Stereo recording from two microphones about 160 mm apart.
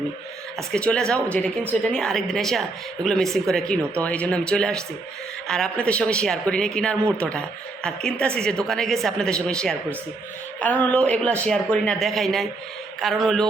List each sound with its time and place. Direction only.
0.7 s a woman's voice: 5° left (ahead or behind)